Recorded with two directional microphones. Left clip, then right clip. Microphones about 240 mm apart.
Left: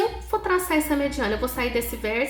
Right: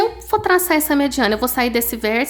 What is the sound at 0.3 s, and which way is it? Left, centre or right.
A woman's voice, right.